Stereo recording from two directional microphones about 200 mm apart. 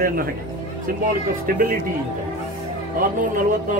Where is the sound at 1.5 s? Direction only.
45° right (ahead or behind).